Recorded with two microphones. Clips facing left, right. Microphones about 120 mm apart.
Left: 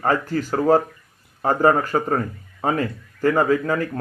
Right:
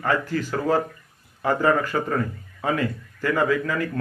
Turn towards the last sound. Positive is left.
turn(degrees=35)  # may be behind; listen again after turning